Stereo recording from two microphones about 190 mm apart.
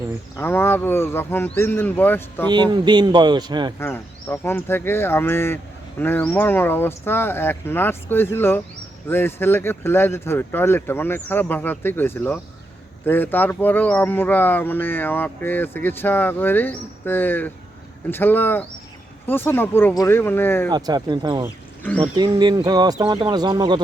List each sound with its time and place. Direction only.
0.3 s speech: 10° left (ahead or behind)
2.5 s speech: 20° right (ahead or behind)
3.8 s speech: 10° left (ahead or behind)
20.7 s speech: 20° right (ahead or behind)